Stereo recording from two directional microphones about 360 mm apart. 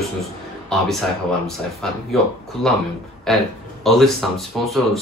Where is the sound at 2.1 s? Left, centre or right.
Centre.